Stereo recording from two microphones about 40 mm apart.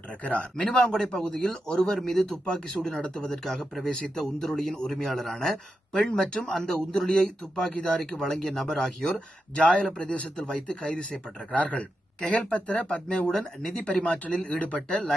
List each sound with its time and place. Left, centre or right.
0.3 s speech: left
0.7 s speech: left
1.7 s a man's voice: centre
2.5 s a man's voice: centre
11.5 s speech: left